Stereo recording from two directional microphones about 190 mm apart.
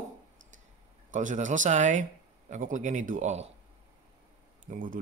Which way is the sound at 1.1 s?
40° right (ahead or behind).